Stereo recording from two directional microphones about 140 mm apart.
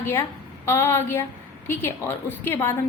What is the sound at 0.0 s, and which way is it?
A woman's voice, 15° left (ahead or behind).